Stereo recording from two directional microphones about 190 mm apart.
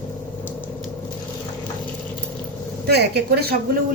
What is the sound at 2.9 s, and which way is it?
Speech, 60° right (ahead or behind).